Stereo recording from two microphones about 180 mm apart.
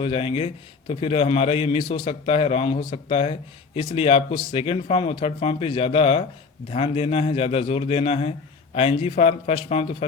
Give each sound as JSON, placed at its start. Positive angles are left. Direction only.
{"t": 0.0, "sound": "a man's voice", "side_deg": 30}